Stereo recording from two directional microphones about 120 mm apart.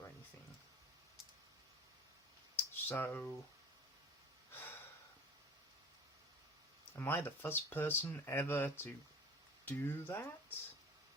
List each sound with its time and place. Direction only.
2.8 s speech: 20° left (ahead or behind)
4.5 s snort: 20° left (ahead or behind)
7.0 s speech: 20° left (ahead or behind)